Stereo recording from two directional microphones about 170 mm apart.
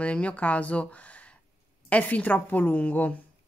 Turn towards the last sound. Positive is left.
turn(degrees=10)  # may be behind; listen again after turning